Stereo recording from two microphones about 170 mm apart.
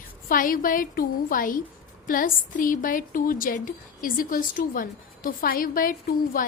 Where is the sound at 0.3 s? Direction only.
55° left (ahead or behind).